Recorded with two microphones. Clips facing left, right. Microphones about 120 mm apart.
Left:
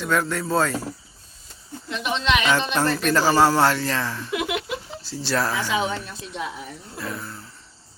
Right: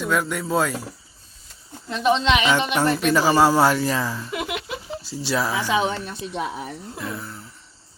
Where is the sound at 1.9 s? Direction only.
30° right (ahead or behind).